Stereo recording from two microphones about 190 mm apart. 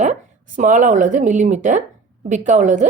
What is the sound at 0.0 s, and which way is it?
A woman's voice, 40° right (ahead or behind).